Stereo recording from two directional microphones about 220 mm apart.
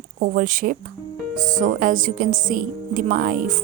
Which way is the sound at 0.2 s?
35° right (ahead or behind).